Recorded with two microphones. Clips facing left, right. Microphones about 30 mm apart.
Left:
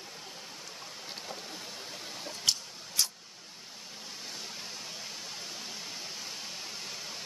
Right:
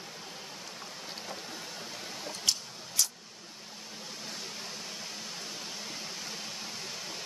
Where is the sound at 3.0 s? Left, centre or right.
Left.